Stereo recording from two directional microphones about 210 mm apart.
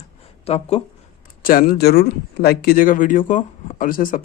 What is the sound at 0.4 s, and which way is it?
Speech, 30° left (ahead or behind).